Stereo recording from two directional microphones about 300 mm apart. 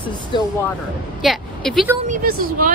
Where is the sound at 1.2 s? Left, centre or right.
Centre.